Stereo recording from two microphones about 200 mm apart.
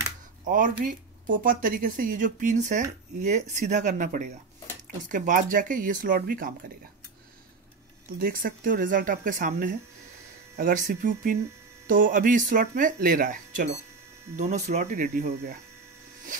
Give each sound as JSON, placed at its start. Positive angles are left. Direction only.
{"t": 0.5, "sound": "speech", "side_deg": -45}
{"t": 8.2, "sound": "speech", "side_deg": -45}